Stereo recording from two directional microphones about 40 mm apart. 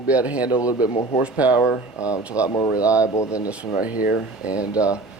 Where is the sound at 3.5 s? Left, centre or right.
Right.